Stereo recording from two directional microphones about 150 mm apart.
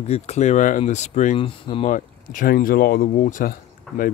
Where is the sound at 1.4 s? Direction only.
35° left (ahead or behind).